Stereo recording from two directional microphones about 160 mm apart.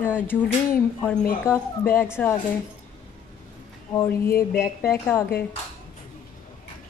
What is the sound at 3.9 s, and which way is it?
Speech, 15° left (ahead or behind).